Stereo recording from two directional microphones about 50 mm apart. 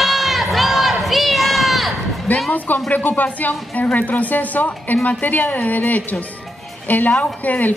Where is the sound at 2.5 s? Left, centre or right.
Left.